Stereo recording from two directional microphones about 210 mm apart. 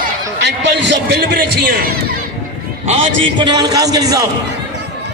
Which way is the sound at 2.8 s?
25° right (ahead or behind).